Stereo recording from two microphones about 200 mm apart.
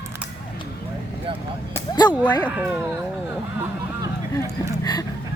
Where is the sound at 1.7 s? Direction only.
20° left (ahead or behind).